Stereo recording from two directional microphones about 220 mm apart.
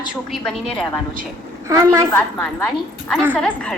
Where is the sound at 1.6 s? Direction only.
15° right (ahead or behind).